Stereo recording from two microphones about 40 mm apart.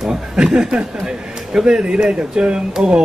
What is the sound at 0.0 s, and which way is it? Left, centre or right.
A man's voice, right.